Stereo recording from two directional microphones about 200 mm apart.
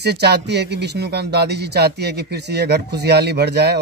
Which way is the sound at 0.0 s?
55° right (ahead or behind).